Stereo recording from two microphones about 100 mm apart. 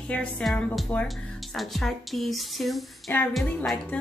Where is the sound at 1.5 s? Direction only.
Centre (ahead or behind).